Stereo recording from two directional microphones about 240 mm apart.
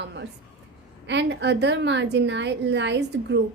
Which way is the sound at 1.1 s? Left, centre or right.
Right.